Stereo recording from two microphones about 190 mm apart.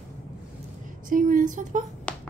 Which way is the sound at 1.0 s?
45° right (ahead or behind).